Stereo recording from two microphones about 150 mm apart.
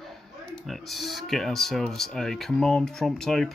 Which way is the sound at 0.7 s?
Centre (ahead or behind).